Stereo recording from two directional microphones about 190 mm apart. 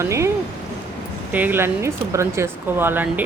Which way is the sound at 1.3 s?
10° right (ahead or behind).